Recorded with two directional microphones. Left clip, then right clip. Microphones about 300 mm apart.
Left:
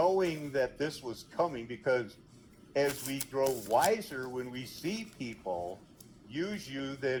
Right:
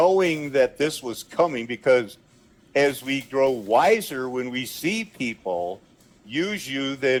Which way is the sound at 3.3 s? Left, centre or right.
Right.